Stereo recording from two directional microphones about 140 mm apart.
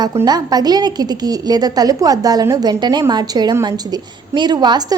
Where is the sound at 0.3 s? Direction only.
30° right (ahead or behind).